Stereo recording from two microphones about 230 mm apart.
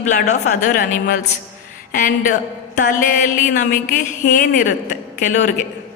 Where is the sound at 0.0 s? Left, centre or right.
Left.